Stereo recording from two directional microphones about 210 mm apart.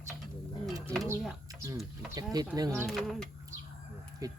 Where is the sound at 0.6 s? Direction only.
Centre (ahead or behind).